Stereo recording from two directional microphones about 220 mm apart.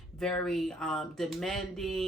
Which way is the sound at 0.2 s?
5° left (ahead or behind).